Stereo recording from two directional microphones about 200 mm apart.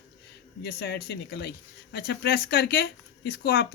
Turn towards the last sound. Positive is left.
turn(degrees=55)  # may be behind; listen again after turning